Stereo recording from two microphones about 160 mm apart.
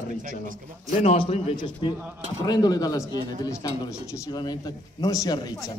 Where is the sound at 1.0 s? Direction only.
35° left (ahead or behind).